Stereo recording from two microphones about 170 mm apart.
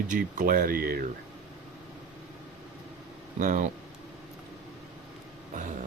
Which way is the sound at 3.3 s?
50° right (ahead or behind).